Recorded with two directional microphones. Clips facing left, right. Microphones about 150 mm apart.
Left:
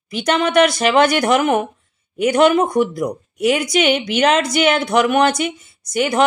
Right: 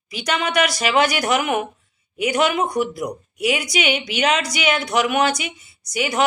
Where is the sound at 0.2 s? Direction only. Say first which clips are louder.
Left 6 dB; 50° left (ahead or behind).